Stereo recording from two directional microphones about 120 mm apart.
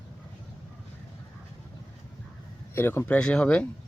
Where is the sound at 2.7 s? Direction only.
20° left (ahead or behind).